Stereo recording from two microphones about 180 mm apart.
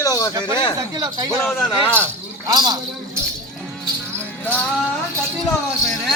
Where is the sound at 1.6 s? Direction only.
10° left (ahead or behind).